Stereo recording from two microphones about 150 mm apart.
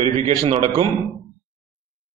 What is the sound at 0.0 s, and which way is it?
Speech, 45° right (ahead or behind).